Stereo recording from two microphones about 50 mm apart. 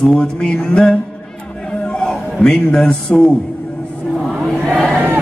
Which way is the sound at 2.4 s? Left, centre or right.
Centre.